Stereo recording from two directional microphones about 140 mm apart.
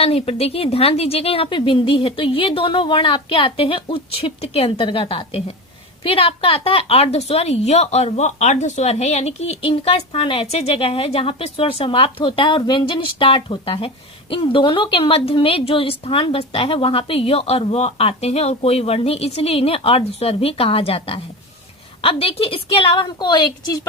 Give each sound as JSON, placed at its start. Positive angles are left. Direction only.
{"t": 0.0, "sound": "a woman's voice", "side_deg": 45}